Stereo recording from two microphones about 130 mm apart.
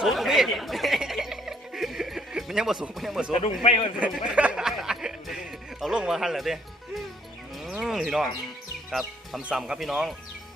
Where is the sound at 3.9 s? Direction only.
10° right (ahead or behind).